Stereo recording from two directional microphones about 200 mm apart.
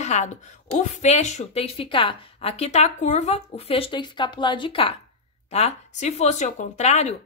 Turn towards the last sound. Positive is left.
turn(degrees=35)  # may be behind; listen again after turning